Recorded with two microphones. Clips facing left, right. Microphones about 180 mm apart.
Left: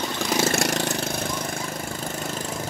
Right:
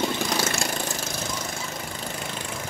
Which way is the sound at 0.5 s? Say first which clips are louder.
Left 5 dB; 70° left (ahead or behind).